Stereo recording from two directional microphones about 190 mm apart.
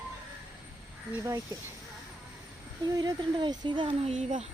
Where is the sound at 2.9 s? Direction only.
20° right (ahead or behind).